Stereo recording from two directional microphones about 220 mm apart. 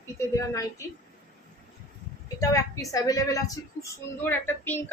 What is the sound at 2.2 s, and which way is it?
Speech, 15° left (ahead or behind).